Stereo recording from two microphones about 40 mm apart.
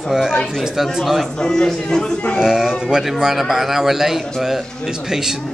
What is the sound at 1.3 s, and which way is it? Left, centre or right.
Speech, centre.